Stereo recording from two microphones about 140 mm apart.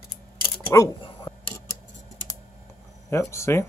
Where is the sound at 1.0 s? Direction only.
35° left (ahead or behind).